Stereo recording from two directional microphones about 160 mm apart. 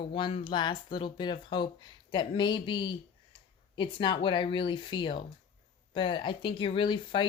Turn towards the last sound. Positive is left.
turn(degrees=30)  # may be behind; listen again after turning